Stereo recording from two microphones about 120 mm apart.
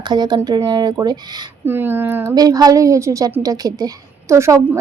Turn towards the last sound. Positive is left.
turn(degrees=-25)  # may be behind; listen again after turning